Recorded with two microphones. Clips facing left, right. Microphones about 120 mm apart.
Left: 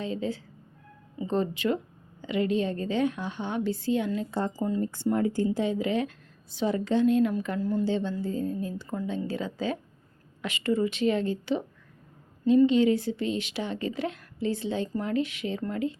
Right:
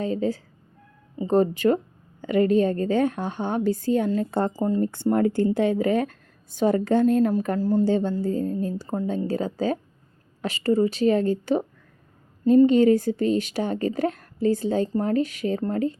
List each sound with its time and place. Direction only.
0.0 s a woman's voice: 45° right (ahead or behind)